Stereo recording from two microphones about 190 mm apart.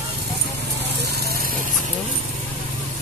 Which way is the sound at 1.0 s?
60° right (ahead or behind).